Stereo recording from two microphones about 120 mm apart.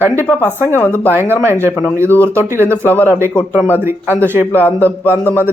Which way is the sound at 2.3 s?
20° right (ahead or behind).